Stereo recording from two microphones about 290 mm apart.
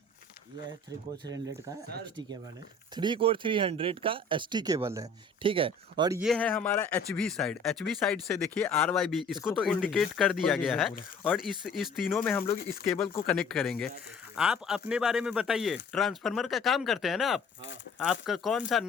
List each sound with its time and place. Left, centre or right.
2.9 s speech: centre
6.2 s speech: centre